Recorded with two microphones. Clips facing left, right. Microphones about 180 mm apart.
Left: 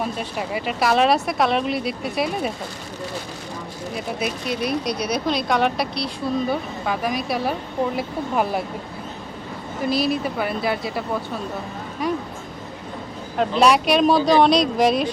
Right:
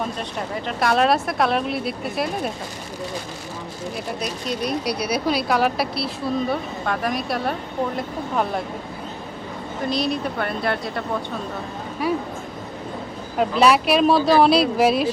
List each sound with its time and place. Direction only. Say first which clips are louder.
0.2 s speech: left 1 dB; 5° left (ahead or behind)
3.9 s speech: left 4 dB; 5° left (ahead or behind)
4.9 s speech: right 1 dB; 5° right (ahead or behind)
9.8 s speech: left 2 dB; 5° left (ahead or behind)
12.0 s speech: right 1 dB; 5° right (ahead or behind)
13.3 s speech: even; 5° right (ahead or behind)